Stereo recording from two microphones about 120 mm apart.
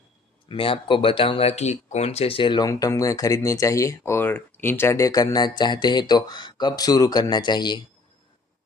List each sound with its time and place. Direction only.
0.4 s speech: 45° left (ahead or behind)
2.6 s speech: 25° left (ahead or behind)